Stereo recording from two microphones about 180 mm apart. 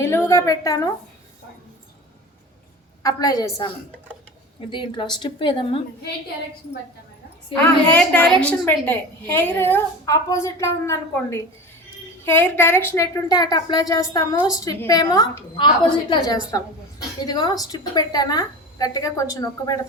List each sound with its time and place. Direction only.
0.3 s a woman's voice: 20° left (ahead or behind)
3.0 s a woman's voice: 20° left (ahead or behind)
7.5 s a woman's voice: 5° left (ahead or behind)